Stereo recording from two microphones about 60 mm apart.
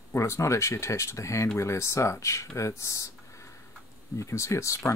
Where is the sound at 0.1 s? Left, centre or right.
Left.